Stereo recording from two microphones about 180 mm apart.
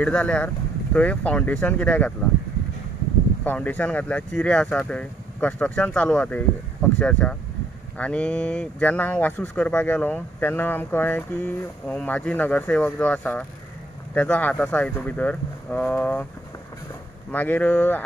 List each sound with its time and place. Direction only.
0.0 s speech: 5° left (ahead or behind)
3.4 s speech: 10° left (ahead or behind)
17.3 s speech: 10° left (ahead or behind)